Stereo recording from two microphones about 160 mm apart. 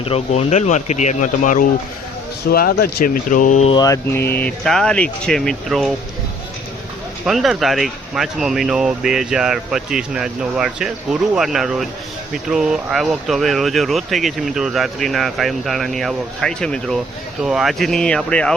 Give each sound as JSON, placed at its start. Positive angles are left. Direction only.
{"t": 0.0, "sound": "speech", "side_deg": 40}
{"t": 2.5, "sound": "speech", "side_deg": 75}
{"t": 3.7, "sound": "mantra", "side_deg": 25}
{"t": 4.3, "sound": "speech", "side_deg": 10}
{"t": 7.3, "sound": "speech", "side_deg": 0}